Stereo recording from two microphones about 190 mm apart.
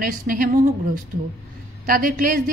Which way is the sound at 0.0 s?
50° right (ahead or behind).